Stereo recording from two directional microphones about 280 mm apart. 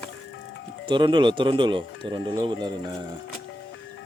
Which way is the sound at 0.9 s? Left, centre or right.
Centre.